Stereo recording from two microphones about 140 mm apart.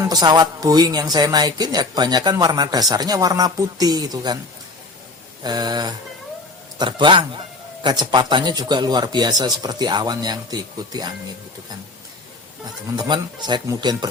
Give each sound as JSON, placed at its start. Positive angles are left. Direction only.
{"t": 0.1, "sound": "speech", "side_deg": -30}
{"t": 5.4, "sound": "a man's voice", "side_deg": -30}
{"t": 13.0, "sound": "a man's voice", "side_deg": -30}